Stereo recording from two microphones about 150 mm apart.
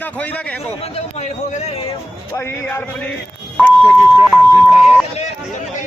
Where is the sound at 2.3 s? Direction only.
15° left (ahead or behind).